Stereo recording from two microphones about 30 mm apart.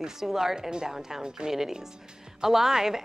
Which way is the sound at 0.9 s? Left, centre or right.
Centre.